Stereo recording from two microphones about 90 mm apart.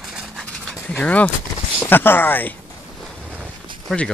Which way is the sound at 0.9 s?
20° left (ahead or behind).